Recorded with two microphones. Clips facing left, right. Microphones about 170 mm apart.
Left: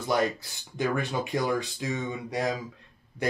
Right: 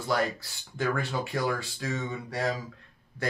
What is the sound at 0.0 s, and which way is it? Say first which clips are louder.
Speech: left 2 dB; 20° left (ahead or behind).